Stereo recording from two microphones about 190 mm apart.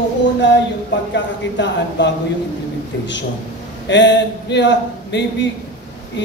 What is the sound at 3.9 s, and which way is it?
A man's voice, 70° left (ahead or behind).